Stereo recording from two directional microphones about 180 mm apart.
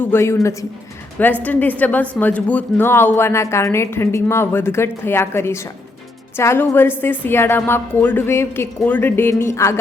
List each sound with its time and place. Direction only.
0.0 s a woman's voice: 15° left (ahead or behind)